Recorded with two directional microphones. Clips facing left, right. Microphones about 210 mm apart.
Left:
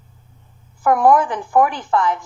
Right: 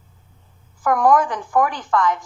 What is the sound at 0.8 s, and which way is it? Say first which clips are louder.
A woman's voice: left 2 dB; 25° left (ahead or behind).